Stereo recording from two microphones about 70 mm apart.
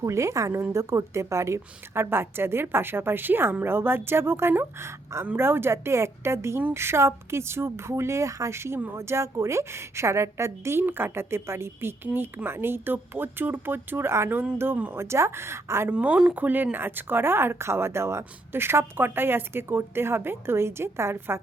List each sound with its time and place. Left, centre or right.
0.0 s a woman's voice: right
15.9 s speech: centre
16.4 s speech: right